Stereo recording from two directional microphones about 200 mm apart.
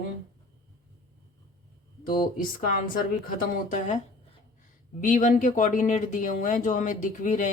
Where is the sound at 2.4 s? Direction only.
45° left (ahead or behind).